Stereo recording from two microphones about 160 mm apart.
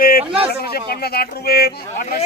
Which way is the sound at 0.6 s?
75° left (ahead or behind).